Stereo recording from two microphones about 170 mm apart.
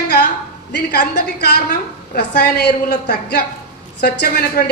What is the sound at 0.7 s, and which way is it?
A woman's voice, 70° left (ahead or behind).